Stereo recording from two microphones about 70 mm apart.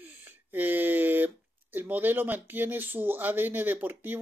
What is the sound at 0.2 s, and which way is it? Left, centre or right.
Speech, right.